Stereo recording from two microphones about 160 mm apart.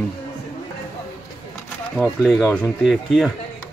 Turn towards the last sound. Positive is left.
turn(degrees=-5)  # may be behind; listen again after turning